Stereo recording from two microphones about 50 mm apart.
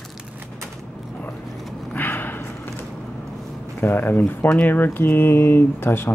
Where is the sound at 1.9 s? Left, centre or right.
Left.